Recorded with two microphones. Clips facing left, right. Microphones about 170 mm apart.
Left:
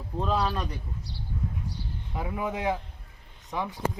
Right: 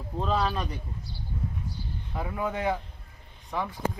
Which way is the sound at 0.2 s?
Centre (ahead or behind).